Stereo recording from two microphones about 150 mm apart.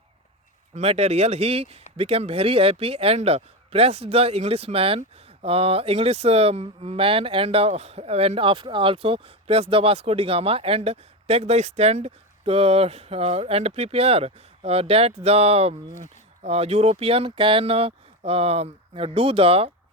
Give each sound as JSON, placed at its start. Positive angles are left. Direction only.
{"t": 0.7, "sound": "speech", "side_deg": -45}